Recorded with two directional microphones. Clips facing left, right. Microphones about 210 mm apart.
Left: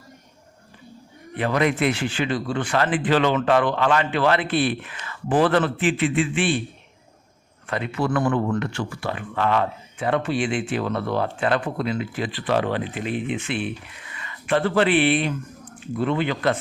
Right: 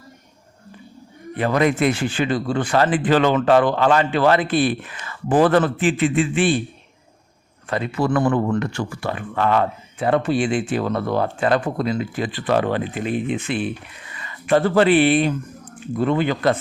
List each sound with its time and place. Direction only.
1.4 s speech: 40° right (ahead or behind)
7.7 s speech: 35° right (ahead or behind)